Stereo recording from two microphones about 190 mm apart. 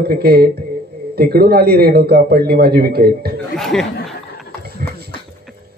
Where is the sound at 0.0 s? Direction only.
55° right (ahead or behind).